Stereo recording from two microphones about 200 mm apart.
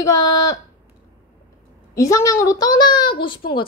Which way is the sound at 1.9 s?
15° left (ahead or behind).